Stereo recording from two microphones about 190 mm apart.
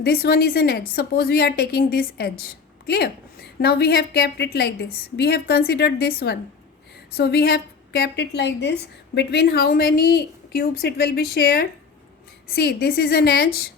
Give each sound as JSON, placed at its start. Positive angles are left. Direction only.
{"t": 0.0, "sound": "a woman's voice", "side_deg": 55}